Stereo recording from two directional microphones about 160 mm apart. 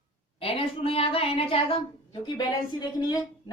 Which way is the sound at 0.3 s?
35° left (ahead or behind).